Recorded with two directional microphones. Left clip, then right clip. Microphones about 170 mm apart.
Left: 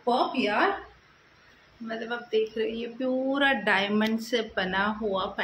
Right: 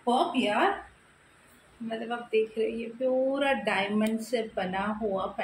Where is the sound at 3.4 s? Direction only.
40° left (ahead or behind).